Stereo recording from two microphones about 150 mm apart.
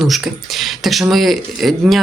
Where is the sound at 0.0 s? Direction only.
Centre (ahead or behind).